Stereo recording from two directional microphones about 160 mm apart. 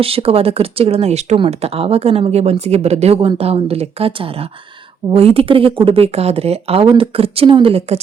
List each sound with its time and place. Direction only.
0.0 s speech: 35° right (ahead or behind)